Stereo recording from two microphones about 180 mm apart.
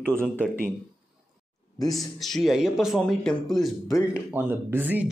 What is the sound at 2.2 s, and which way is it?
A man's voice, centre (ahead or behind).